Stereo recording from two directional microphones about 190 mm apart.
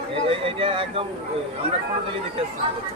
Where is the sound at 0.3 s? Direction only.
30° right (ahead or behind).